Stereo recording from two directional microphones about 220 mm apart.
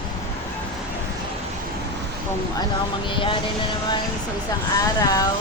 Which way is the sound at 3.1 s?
25° left (ahead or behind).